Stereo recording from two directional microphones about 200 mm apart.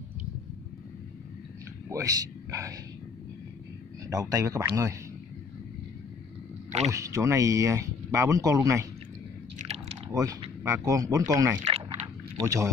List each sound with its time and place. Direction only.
1.9 s speech: 15° right (ahead or behind)
4.1 s speech: 15° right (ahead or behind)
6.9 s speech: 15° right (ahead or behind)
10.1 s speech: 15° right (ahead or behind)